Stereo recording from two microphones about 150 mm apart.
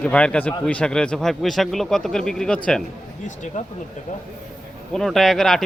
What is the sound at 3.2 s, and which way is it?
Speech, 55° left (ahead or behind).